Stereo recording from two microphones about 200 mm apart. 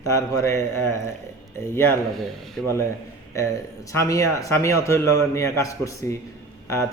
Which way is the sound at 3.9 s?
15° left (ahead or behind).